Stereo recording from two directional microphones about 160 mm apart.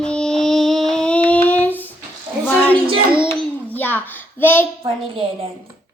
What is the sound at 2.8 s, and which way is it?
Speech, 30° right (ahead or behind).